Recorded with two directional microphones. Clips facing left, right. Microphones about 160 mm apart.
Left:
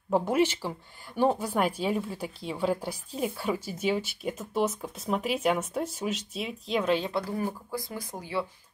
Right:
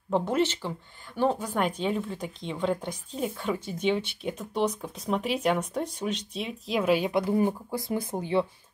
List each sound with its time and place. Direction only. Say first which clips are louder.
0.1 s speech: left 1 dB; 10° left (ahead or behind); by 8.5 s 25° right (ahead or behind)